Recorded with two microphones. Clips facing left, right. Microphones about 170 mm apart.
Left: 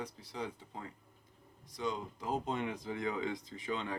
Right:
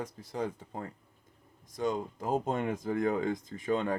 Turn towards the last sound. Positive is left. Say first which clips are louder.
# right 8 dB
turn(degrees=-45)  # may be behind; listen again after turning